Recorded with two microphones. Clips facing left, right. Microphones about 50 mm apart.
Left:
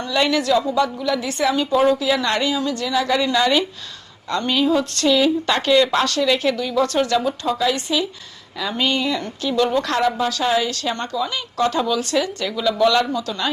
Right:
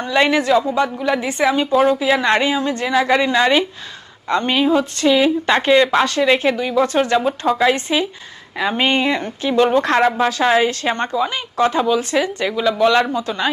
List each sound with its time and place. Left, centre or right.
0.0 s a woman's voice: right